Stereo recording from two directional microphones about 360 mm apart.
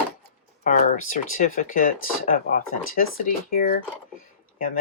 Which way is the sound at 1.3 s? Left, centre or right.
Left.